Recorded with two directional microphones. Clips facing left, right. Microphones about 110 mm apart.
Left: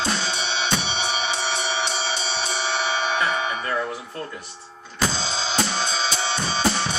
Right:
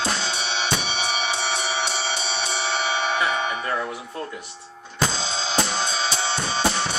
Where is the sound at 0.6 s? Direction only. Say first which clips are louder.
Left 1 dB; 5° right (ahead or behind).